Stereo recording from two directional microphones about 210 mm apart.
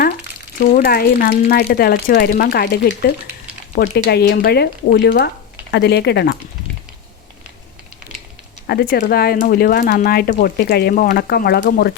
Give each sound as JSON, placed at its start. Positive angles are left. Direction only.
{"t": 0.6, "sound": "speech", "side_deg": 45}
{"t": 8.6, "sound": "speech", "side_deg": 50}